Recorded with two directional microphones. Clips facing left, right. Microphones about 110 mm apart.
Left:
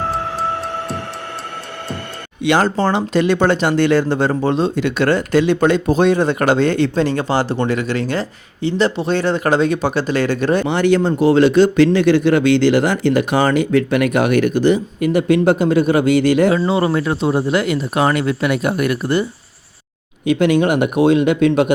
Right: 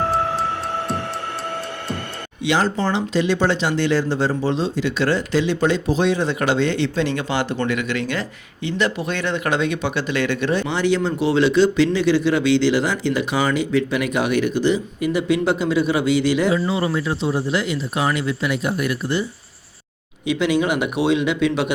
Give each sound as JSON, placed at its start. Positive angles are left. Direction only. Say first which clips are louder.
{"t": 2.4, "sound": "speech", "louder": "left 5 dB", "side_deg": 55}
{"t": 20.2, "sound": "speech", "louder": "left 5 dB", "side_deg": 50}